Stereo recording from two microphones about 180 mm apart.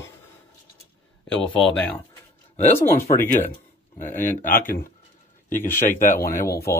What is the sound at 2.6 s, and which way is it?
Speech, 10° left (ahead or behind).